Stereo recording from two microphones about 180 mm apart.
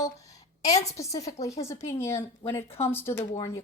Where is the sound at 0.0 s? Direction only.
20° left (ahead or behind).